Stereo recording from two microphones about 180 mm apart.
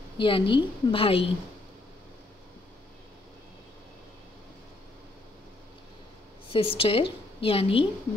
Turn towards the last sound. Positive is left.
turn(degrees=30)  # may be behind; listen again after turning